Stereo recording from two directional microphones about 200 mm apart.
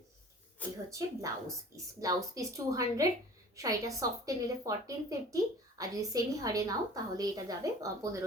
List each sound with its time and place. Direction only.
0.9 s a woman's voice: 15° right (ahead or behind)